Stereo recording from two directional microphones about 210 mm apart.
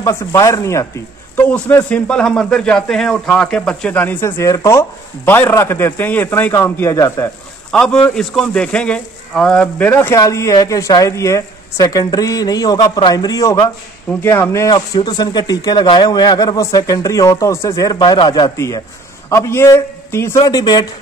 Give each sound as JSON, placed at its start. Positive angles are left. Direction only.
{"t": 0.0, "sound": "a man's voice", "side_deg": 15}